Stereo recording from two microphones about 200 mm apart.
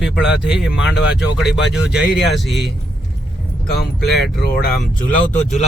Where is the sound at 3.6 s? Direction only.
50° left (ahead or behind).